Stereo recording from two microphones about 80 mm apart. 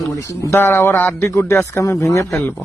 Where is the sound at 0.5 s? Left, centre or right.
Left.